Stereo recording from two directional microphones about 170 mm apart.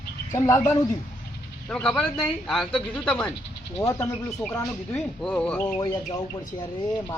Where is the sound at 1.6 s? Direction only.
5° left (ahead or behind).